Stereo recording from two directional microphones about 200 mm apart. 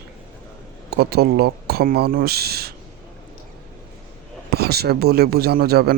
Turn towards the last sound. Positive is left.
turn(degrees=-50)  # may be behind; listen again after turning